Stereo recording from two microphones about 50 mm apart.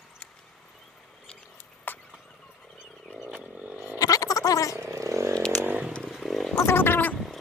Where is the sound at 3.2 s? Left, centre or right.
Centre.